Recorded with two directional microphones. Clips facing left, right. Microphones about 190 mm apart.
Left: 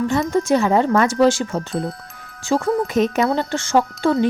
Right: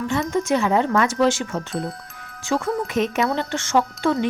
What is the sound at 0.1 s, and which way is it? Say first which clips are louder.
Speech: even; 35° left (ahead or behind).